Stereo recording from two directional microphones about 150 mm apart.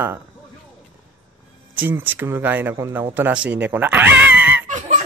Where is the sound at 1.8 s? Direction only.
15° right (ahead or behind).